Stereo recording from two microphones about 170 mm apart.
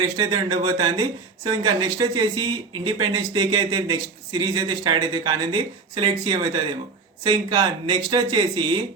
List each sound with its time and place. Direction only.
0.2 s speech: 25° right (ahead or behind)